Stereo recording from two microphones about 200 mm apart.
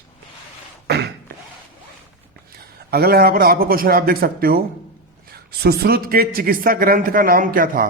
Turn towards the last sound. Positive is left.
turn(degrees=-45)  # may be behind; listen again after turning